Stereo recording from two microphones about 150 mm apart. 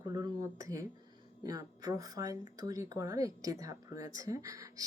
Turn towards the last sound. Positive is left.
turn(degrees=-20)  # may be behind; listen again after turning